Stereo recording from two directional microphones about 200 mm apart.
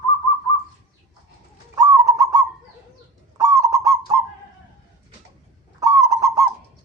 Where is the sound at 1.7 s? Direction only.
15° right (ahead or behind).